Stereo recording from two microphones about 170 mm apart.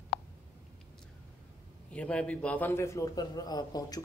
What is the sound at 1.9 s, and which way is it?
A man's voice, 5° left (ahead or behind).